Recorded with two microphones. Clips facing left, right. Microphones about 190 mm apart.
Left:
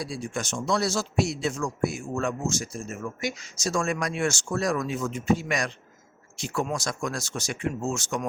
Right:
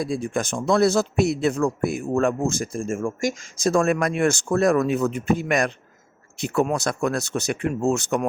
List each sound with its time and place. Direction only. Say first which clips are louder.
0.0 s speech: right 7 dB; 55° right (ahead or behind)